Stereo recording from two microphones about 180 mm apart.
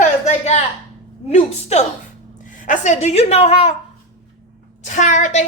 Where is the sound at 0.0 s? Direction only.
40° left (ahead or behind).